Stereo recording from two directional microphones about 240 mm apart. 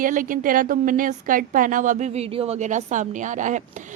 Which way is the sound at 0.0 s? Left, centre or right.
Right.